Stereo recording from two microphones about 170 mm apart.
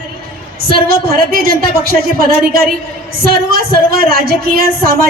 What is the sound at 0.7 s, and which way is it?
A woman's voice, 60° right (ahead or behind).